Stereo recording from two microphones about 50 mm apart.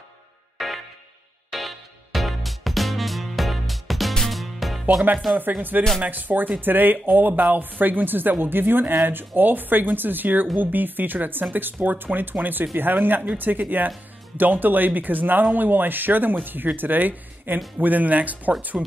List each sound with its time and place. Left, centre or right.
0.6 s music: centre
5.6 s speech: right